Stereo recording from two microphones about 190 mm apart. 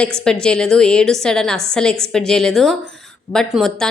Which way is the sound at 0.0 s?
5° left (ahead or behind).